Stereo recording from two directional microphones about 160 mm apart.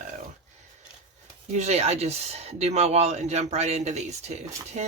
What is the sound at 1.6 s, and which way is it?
Speech, 40° right (ahead or behind).